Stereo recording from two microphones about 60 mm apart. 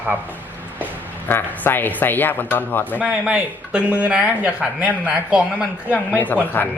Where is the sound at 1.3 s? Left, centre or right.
Left.